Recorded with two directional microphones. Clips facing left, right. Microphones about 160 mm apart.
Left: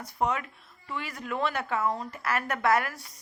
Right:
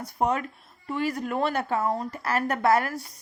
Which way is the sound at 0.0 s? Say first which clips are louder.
Right 3 dB; 40° right (ahead or behind).